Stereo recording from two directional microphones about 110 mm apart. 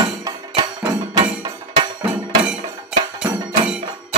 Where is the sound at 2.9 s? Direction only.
5° right (ahead or behind).